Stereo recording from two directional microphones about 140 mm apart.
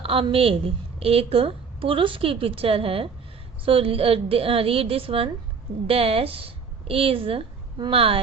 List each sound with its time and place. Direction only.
0.0 s a woman's voice: 40° right (ahead or behind)